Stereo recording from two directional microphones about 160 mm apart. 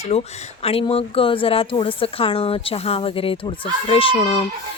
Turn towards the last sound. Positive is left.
turn(degrees=35)  # may be behind; listen again after turning